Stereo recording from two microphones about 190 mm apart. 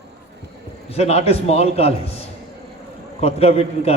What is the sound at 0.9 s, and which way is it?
A man's voice, 35° left (ahead or behind).